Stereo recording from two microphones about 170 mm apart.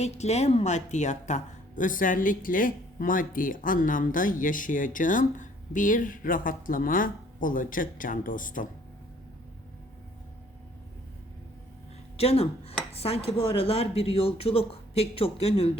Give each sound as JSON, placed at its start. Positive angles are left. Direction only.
{"t": 0.0, "sound": "a woman's voice", "side_deg": 40}
{"t": 12.1, "sound": "speech", "side_deg": 35}